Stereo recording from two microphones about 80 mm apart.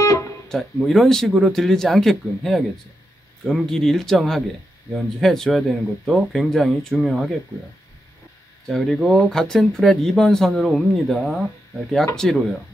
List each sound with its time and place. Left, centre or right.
0.0 s music: left
0.7 s speech: centre
8.6 s speech: centre